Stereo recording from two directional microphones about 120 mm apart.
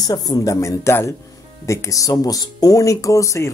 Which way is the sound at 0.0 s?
30° left (ahead or behind).